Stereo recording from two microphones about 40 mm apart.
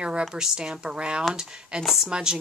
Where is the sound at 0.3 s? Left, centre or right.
Centre.